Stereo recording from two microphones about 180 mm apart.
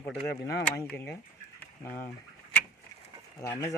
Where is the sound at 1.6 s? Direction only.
10° left (ahead or behind).